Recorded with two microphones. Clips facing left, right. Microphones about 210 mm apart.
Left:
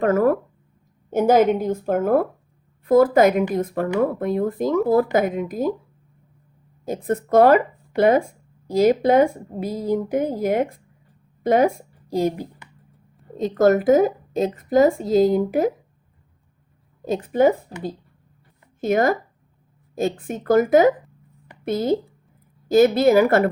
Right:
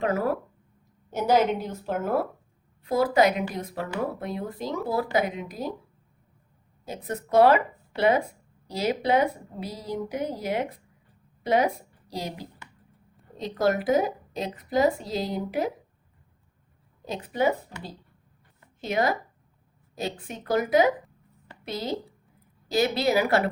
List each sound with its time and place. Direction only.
0.0 s a woman's voice: 50° left (ahead or behind)
6.8 s a woman's voice: 50° left (ahead or behind)
13.6 s a woman's voice: 45° left (ahead or behind)
17.1 s a woman's voice: 50° left (ahead or behind)